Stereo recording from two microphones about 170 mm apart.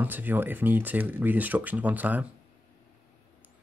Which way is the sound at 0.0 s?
10° right (ahead or behind).